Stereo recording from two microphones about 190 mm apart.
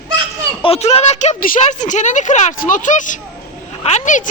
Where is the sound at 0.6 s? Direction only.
30° left (ahead or behind).